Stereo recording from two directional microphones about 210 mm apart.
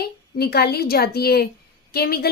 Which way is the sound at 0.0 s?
50° left (ahead or behind).